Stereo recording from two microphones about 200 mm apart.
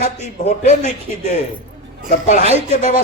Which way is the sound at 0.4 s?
35° left (ahead or behind).